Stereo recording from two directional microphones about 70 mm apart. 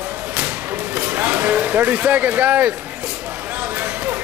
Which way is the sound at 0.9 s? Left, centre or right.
Right.